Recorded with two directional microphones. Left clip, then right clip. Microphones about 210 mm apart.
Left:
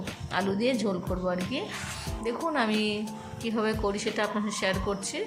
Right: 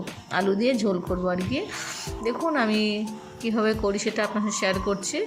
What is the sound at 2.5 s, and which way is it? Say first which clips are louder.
Speech: right 3 dB; 15° right (ahead or behind).